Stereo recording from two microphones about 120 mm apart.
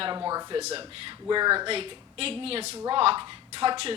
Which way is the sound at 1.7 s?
55° right (ahead or behind).